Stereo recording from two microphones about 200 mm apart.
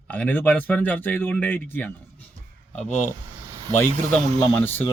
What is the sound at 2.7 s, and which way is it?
Speech, 35° left (ahead or behind).